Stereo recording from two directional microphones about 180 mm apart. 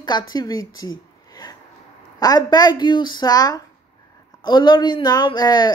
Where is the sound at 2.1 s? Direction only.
20° left (ahead or behind).